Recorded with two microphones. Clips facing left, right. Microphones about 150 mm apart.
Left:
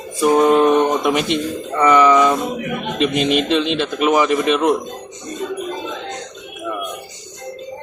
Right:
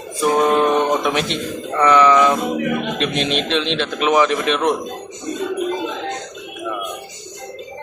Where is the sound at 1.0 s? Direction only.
5° left (ahead or behind).